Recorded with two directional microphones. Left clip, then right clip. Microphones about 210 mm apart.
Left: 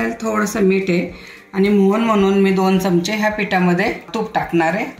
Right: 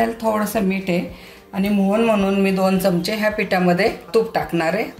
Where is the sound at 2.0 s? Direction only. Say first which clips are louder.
Left 3 dB; 40° right (ahead or behind).